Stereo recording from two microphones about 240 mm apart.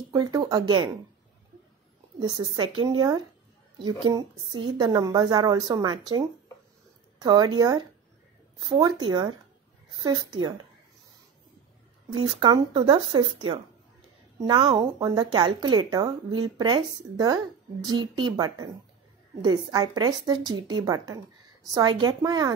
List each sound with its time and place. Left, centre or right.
0.1 s speech: centre
2.1 s speech: centre
12.2 s speech: right